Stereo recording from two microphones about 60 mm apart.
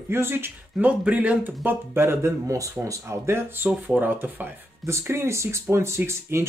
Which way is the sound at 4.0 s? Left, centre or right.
Right.